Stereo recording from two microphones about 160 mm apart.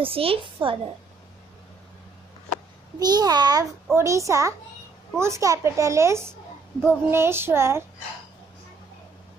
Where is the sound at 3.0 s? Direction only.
25° right (ahead or behind).